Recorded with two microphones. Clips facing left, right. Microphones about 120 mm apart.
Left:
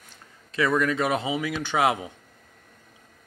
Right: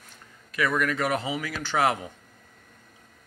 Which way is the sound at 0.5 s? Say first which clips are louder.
Left 3 dB; 25° left (ahead or behind).